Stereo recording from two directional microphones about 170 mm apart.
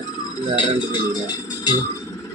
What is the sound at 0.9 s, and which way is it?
Speech, 25° left (ahead or behind).